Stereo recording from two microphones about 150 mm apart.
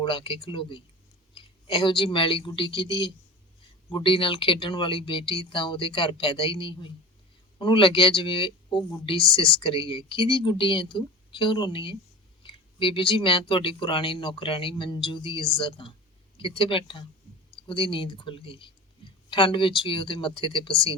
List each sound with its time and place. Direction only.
0.0 s speech: 35° left (ahead or behind)